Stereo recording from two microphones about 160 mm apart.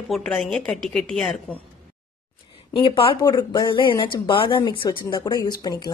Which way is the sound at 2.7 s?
35° left (ahead or behind).